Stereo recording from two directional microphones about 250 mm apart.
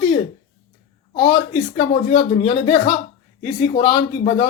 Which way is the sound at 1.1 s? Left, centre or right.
Centre.